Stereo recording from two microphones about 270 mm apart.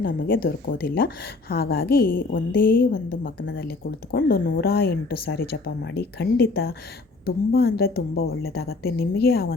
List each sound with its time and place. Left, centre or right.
0.0 s speech: left